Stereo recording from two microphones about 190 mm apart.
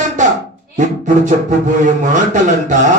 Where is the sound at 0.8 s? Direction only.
40° right (ahead or behind).